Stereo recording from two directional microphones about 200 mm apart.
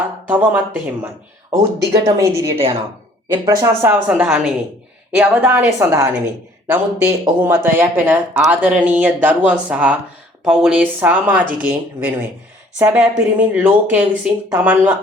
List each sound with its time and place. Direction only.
0.3 s speech: 10° right (ahead or behind)
1.5 s speech: 20° right (ahead or behind)